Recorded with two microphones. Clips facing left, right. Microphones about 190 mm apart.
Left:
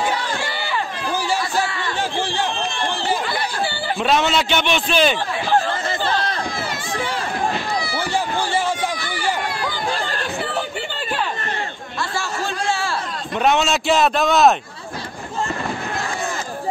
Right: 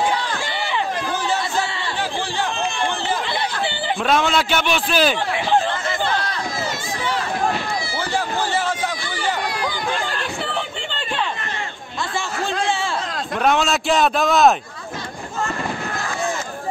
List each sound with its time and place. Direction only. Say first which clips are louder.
4.0 s a man's voice: left 1 dB; centre (ahead or behind)
13.4 s a man's voice: left 1 dB; centre (ahead or behind)